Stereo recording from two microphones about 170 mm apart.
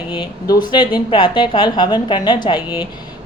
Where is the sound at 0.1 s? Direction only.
25° left (ahead or behind).